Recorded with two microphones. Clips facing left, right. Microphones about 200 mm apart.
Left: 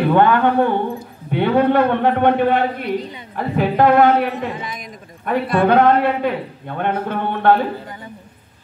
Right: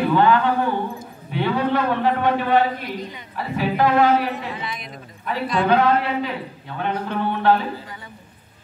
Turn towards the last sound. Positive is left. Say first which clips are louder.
# left 3 dB
turn(degrees=55)  # may be behind; listen again after turning